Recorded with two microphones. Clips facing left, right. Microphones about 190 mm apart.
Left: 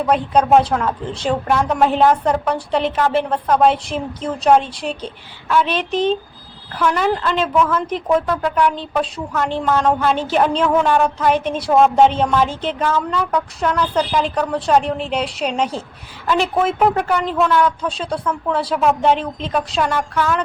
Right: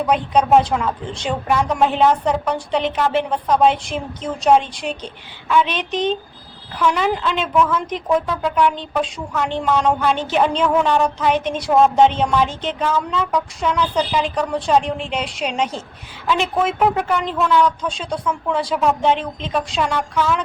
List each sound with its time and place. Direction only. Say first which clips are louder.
0.0 s a woman's voice: left 1 dB; centre (ahead or behind)
6.7 s a woman's voice: left 1 dB; centre (ahead or behind)